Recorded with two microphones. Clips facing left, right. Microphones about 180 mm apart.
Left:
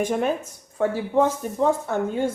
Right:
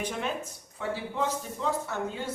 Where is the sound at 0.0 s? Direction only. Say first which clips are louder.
Left 9 dB; 50° left (ahead or behind).